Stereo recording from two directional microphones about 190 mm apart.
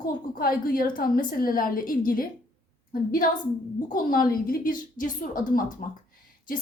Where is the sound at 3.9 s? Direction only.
45° left (ahead or behind).